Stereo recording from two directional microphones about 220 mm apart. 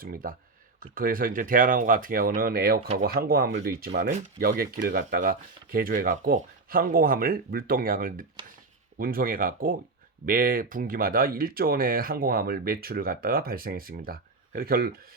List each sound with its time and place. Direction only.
0.0 s speech: 40° right (ahead or behind)